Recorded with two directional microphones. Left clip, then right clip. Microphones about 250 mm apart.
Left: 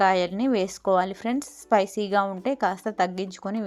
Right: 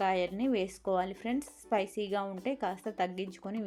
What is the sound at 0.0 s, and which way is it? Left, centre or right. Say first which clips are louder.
Speech: left 9 dB; centre.